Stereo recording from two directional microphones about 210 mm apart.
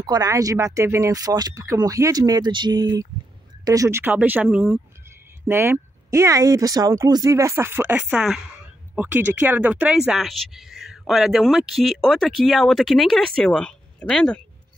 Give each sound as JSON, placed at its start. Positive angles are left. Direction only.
{"t": 0.0, "sound": "speech", "side_deg": -20}